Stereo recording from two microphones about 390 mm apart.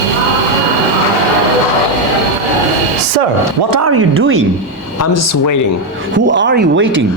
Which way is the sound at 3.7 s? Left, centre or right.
Right.